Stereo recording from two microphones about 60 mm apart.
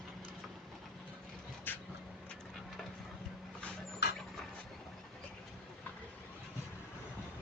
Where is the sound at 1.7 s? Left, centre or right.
Left.